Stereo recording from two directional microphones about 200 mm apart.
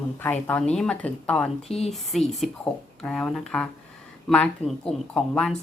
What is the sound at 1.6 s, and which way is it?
Speech, 30° left (ahead or behind).